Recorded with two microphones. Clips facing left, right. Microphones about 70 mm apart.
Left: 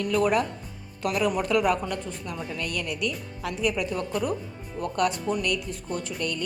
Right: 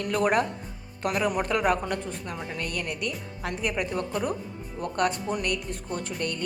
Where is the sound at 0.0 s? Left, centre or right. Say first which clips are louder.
Left 1 dB; right.